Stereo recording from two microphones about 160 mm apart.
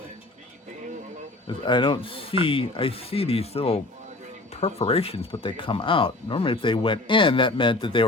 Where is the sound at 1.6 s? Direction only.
30° left (ahead or behind).